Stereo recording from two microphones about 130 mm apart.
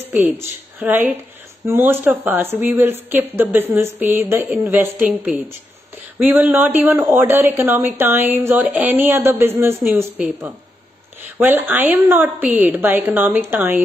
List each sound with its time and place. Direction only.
0.1 s speech: 15° right (ahead or behind)